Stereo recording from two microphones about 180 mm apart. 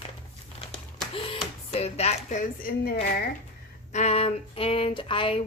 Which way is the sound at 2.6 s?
60° left (ahead or behind).